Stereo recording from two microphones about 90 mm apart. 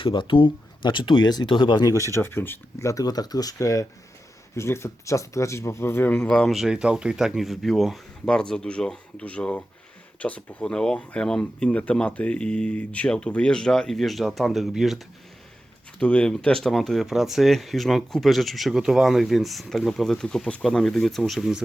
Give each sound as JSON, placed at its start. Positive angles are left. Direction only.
{"t": 0.0, "sound": "speech", "side_deg": 65}
{"t": 2.1, "sound": "speech", "side_deg": 25}
{"t": 2.9, "sound": "speech", "side_deg": 45}
{"t": 4.5, "sound": "speech", "side_deg": 30}
{"t": 6.1, "sound": "speech", "side_deg": 10}
{"t": 6.5, "sound": "speech", "side_deg": -5}
{"t": 16.0, "sound": "speech", "side_deg": 15}